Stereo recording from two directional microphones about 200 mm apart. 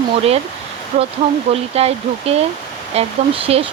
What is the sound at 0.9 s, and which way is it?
Speech, 35° right (ahead or behind).